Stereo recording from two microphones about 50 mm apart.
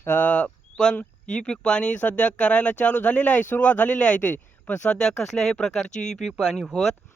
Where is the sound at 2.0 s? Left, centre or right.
Left; by 6.3 s centre.